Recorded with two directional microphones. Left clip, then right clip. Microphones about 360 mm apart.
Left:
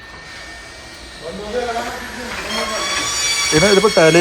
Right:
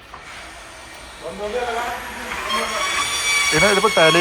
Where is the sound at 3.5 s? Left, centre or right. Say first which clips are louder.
Left 5 dB; centre.